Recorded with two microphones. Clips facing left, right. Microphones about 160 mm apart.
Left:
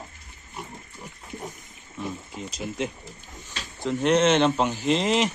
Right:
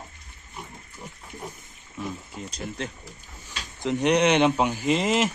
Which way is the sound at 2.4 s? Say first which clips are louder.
Left 4 dB; centre (ahead or behind).